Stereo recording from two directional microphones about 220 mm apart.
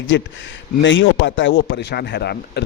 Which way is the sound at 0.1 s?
55° left (ahead or behind).